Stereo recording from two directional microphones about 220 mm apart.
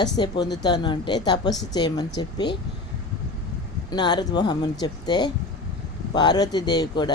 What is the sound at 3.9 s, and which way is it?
Speech, 20° left (ahead or behind).